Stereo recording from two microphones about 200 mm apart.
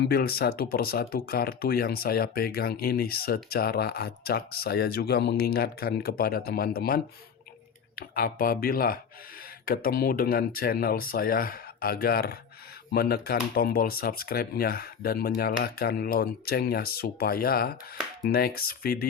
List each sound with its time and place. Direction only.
0.1 s speech: 50° left (ahead or behind)